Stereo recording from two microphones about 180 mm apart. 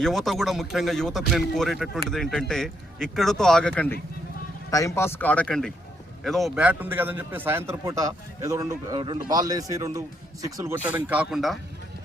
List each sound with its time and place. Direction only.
0.0 s a man's voice: centre (ahead or behind)
4.7 s a man's voice: 20° left (ahead or behind); by 11.6 s centre (ahead or behind)